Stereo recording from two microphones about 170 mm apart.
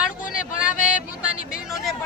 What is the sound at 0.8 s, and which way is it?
Speech, 50° left (ahead or behind).